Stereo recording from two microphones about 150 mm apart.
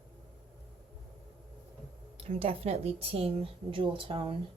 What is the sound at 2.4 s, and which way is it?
Speech, 40° right (ahead or behind).